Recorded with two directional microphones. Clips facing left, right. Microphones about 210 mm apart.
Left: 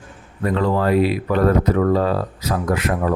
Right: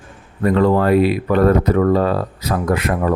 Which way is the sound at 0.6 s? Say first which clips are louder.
Right 2 dB; 60° right (ahead or behind).